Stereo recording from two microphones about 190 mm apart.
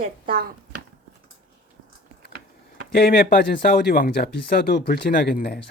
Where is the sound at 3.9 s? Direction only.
50° left (ahead or behind).